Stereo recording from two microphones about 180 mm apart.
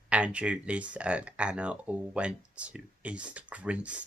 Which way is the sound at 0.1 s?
5° right (ahead or behind).